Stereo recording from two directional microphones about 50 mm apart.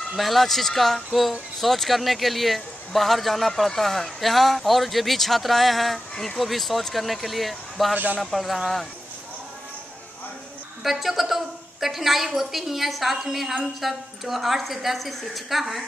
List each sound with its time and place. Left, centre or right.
0.1 s speech: centre
7.9 s speech: right
8.2 s speech: centre
10.8 s speech: centre